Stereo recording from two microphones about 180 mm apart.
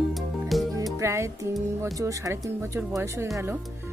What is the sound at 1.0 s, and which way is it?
Speech, 15° right (ahead or behind).